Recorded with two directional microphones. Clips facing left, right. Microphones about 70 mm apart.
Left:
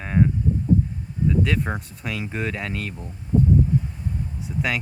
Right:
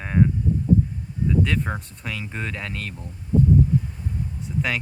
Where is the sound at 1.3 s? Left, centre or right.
Centre.